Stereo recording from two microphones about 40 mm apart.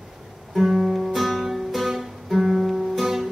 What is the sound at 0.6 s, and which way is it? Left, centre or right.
Music, centre.